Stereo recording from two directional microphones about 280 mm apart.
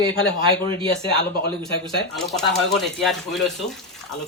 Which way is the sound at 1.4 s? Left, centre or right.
Centre.